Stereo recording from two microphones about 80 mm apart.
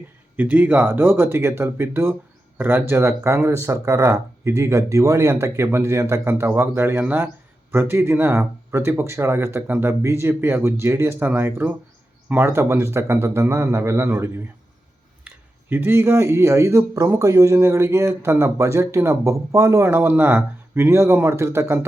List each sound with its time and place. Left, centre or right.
0.3 s speech: right
15.7 s speech: right
19.9 s speech: right